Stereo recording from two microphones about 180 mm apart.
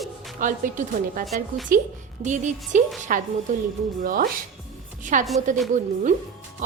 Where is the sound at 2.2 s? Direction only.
40° right (ahead or behind).